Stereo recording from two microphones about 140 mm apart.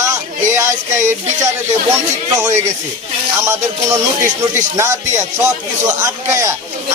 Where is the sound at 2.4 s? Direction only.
25° right (ahead or behind).